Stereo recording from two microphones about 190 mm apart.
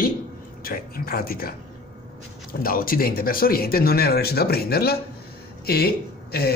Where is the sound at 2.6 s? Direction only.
50° left (ahead or behind).